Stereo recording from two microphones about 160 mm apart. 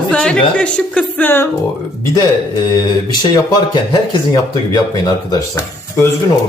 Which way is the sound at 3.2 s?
25° left (ahead or behind).